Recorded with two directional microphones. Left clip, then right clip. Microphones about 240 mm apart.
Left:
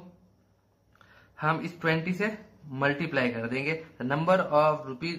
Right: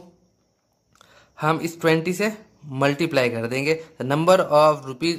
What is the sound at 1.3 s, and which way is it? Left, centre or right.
Speech, right.